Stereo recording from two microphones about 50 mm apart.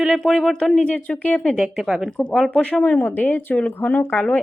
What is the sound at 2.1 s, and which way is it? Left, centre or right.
Speech, left.